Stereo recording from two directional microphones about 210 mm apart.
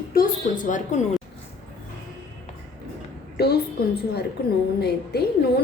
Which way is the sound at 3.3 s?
50° left (ahead or behind).